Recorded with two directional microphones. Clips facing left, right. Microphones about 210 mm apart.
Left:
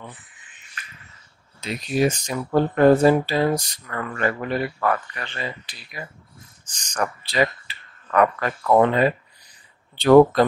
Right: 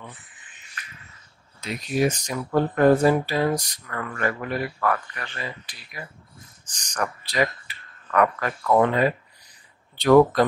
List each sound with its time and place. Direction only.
1.6 s speech: 25° left (ahead or behind)
6.9 s speech: 25° left (ahead or behind)